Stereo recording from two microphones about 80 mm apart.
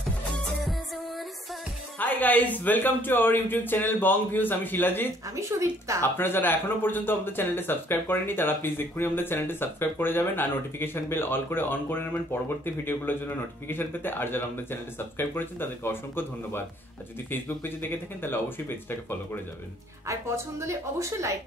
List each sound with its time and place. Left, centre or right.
2.0 s speech: left
5.3 s speech: right
6.1 s speech: left
20.1 s speech: right